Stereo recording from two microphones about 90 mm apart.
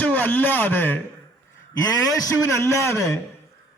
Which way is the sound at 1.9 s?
40° left (ahead or behind).